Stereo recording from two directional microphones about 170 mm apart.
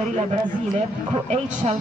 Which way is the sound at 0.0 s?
45° right (ahead or behind).